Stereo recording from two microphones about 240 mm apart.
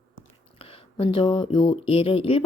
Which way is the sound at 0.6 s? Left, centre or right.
Left.